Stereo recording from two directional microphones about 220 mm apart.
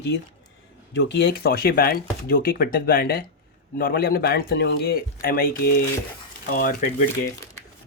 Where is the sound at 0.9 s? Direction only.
50° left (ahead or behind).